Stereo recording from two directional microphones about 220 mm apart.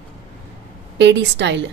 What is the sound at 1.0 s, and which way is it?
Speech, 50° right (ahead or behind).